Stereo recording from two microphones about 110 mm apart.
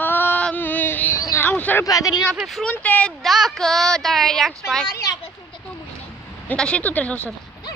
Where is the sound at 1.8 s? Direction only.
35° left (ahead or behind).